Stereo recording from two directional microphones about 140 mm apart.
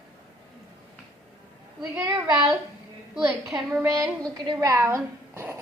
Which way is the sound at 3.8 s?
20° right (ahead or behind).